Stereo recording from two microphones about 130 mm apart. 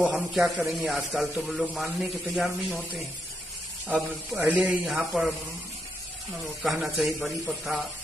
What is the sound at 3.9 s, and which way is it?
A man's voice, 10° right (ahead or behind).